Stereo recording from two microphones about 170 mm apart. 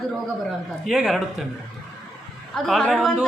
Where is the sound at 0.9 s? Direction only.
Centre (ahead or behind).